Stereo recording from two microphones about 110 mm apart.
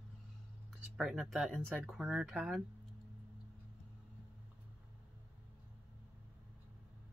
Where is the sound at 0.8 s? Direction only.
5° right (ahead or behind).